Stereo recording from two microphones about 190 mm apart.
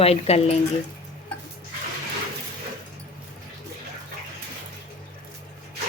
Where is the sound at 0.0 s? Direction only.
35° left (ahead or behind).